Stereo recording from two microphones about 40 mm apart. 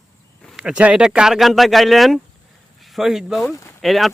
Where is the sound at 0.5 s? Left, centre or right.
Right.